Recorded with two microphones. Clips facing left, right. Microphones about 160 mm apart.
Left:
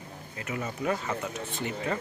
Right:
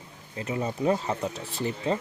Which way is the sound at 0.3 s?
30° right (ahead or behind).